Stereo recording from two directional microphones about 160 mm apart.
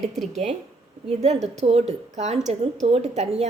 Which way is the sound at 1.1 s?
40° right (ahead or behind).